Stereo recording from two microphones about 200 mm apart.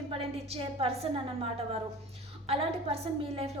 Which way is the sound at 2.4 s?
30° right (ahead or behind).